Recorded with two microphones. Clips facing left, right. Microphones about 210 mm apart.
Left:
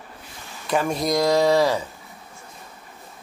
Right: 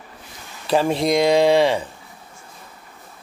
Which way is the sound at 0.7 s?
30° right (ahead or behind).